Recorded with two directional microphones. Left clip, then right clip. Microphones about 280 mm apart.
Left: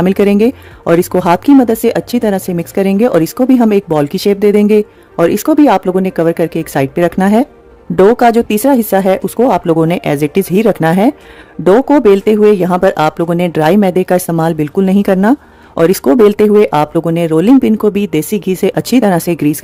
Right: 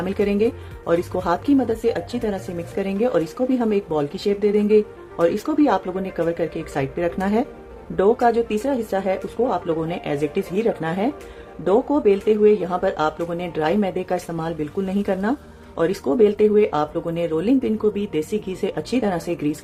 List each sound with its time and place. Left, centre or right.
0.0 s speech: left